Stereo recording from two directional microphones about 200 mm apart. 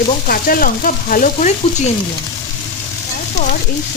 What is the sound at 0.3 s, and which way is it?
Speech, 45° left (ahead or behind).